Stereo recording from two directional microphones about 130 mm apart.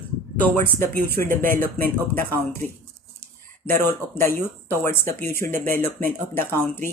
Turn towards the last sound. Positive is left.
turn(degrees=15)  # may be behind; listen again after turning